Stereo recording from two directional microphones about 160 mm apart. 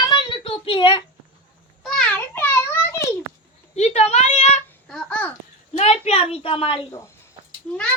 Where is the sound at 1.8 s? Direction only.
5° left (ahead or behind).